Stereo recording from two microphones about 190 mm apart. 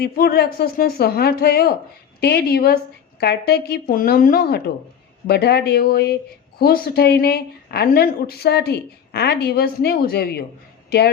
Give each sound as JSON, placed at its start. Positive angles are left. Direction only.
{"t": 0.0, "sound": "a woman's voice", "side_deg": 55}